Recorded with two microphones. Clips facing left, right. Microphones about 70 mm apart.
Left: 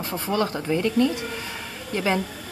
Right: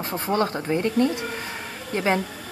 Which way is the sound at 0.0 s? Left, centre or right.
Right.